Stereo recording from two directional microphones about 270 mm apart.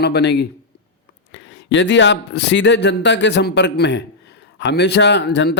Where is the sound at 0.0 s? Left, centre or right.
Left.